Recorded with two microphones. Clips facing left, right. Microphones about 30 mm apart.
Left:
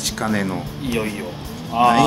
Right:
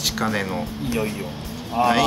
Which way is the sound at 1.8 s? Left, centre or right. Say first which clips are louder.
Left 4 dB; left.